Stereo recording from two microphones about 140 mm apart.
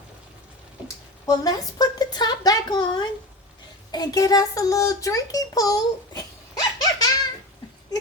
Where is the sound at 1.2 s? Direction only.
25° left (ahead or behind).